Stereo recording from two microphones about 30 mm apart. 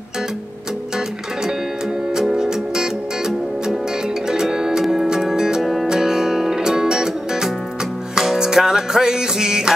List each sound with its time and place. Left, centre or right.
2.1 s music: centre